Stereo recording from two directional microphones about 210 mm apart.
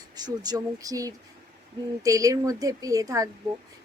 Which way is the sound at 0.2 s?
20° right (ahead or behind).